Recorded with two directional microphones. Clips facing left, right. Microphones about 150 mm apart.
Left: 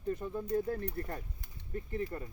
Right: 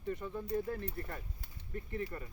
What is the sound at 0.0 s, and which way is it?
Speech, 40° left (ahead or behind).